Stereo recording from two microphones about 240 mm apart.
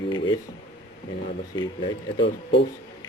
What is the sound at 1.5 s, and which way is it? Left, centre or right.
Speech, centre.